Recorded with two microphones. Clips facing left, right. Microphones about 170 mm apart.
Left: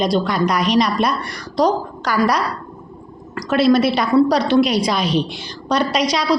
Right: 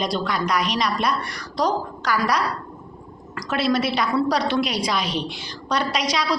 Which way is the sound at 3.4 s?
35° left (ahead or behind).